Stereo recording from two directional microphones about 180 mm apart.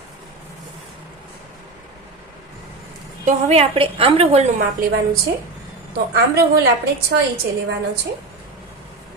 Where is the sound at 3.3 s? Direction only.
35° right (ahead or behind).